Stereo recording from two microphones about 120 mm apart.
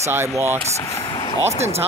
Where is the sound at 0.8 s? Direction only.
25° left (ahead or behind).